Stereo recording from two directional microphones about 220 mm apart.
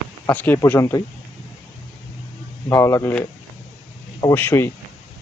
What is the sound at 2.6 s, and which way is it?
Speech, 10° left (ahead or behind).